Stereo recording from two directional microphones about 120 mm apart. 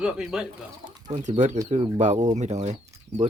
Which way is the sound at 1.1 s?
70° right (ahead or behind).